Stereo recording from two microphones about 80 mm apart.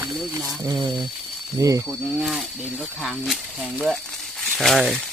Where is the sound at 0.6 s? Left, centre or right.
Right.